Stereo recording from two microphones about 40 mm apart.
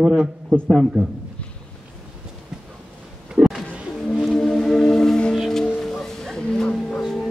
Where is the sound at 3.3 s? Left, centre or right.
Right.